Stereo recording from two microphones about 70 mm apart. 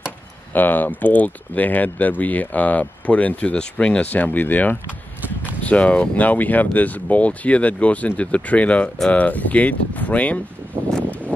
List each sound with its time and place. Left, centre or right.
0.5 s speech: left